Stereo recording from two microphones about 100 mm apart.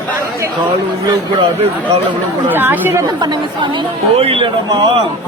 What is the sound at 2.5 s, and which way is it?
Speech, 20° right (ahead or behind).